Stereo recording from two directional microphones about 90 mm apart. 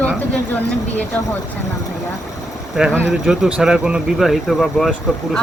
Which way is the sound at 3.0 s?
5° right (ahead or behind).